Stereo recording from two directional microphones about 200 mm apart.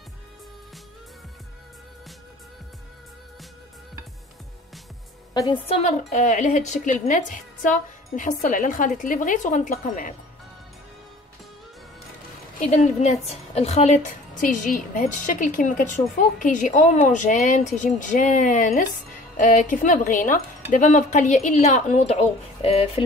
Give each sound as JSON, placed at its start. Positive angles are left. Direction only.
{"t": 5.3, "sound": "a woman's voice", "side_deg": 20}
{"t": 12.5, "sound": "a woman's voice", "side_deg": 35}